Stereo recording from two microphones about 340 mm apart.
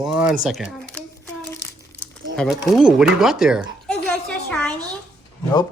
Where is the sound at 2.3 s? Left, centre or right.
Centre.